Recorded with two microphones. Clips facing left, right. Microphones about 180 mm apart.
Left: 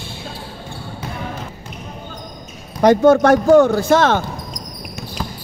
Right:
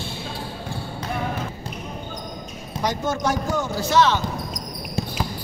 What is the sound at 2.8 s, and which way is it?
Speech, 60° left (ahead or behind).